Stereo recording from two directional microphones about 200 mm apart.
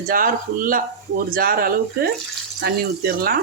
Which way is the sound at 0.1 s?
45° right (ahead or behind).